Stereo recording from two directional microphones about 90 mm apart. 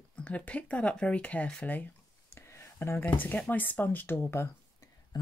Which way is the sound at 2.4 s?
30° left (ahead or behind).